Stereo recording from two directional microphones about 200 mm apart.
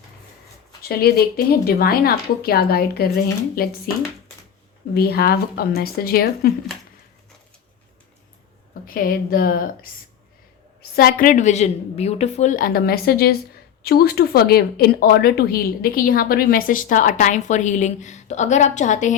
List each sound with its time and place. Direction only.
0.8 s speech: 50° left (ahead or behind)
4.9 s speech: 50° left (ahead or behind)
8.9 s speech: 45° left (ahead or behind)
10.9 s speech: 45° left (ahead or behind)